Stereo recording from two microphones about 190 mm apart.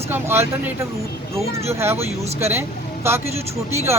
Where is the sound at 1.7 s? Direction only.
15° right (ahead or behind).